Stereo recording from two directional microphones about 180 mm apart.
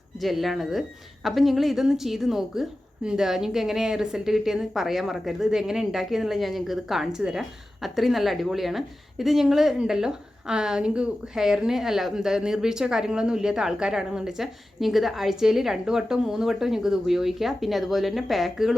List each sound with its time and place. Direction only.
0.2 s speech: centre (ahead or behind)